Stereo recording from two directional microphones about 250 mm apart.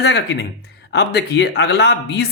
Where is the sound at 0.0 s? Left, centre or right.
Left.